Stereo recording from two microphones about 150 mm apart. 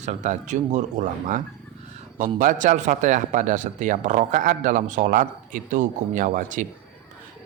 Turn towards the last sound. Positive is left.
turn(degrees=-60)  # may be behind; listen again after turning